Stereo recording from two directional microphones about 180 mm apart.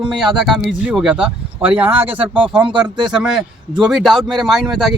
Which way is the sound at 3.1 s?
5° right (ahead or behind).